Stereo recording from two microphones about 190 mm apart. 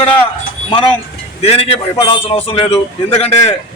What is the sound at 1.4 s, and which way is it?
A man's voice, 30° left (ahead or behind).